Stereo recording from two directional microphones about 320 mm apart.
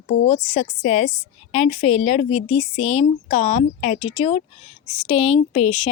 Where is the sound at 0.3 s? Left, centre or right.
Centre.